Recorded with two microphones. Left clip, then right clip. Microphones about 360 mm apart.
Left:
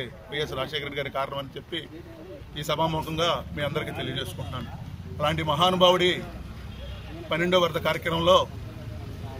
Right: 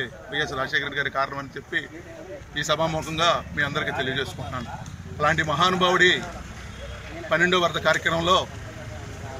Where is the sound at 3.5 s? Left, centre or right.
Left.